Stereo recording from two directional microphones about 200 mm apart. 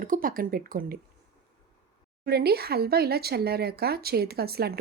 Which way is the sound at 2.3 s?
55° right (ahead or behind).